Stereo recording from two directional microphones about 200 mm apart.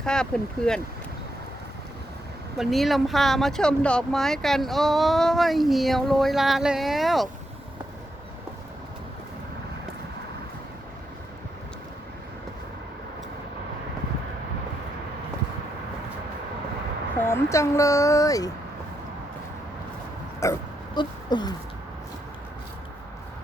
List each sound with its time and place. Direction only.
0.0 s speech: 5° left (ahead or behind)
2.6 s speech: centre (ahead or behind)
17.2 s speech: 10° left (ahead or behind)
20.4 s dog: 20° left (ahead or behind)